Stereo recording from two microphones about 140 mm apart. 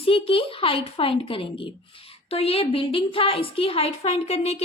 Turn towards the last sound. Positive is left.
turn(degrees=50)  # may be behind; listen again after turning